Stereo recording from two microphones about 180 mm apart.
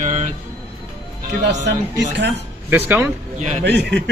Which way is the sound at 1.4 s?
70° right (ahead or behind).